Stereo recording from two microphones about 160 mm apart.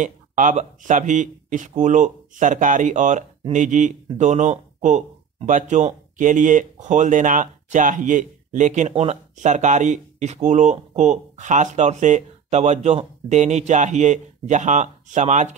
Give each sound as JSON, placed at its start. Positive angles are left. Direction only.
{"t": 0.0, "sound": "speech", "side_deg": -50}